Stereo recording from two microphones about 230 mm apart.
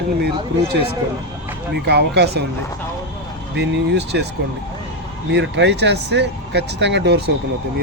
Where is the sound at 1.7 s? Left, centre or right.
Right.